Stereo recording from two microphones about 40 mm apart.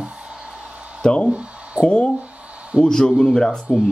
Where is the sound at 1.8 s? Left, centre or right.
Left.